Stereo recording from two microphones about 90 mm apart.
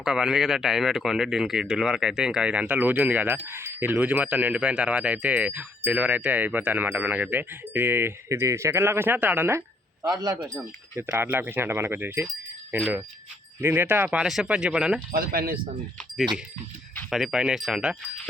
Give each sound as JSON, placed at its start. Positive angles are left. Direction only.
{"t": 0.0, "sound": "speech", "side_deg": -5}
{"t": 10.0, "sound": "speech", "side_deg": -45}
{"t": 10.4, "sound": "speech", "side_deg": -25}
{"t": 14.2, "sound": "speech", "side_deg": -5}
{"t": 17.1, "sound": "wind chime", "side_deg": -5}